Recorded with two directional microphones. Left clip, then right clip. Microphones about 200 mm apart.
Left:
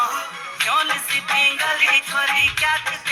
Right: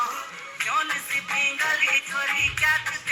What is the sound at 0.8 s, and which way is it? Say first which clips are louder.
Music: left 5 dB; 60° left (ahead or behind).